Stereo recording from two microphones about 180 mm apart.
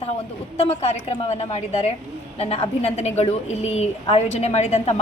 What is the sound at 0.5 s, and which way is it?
A woman's voice, 35° left (ahead or behind).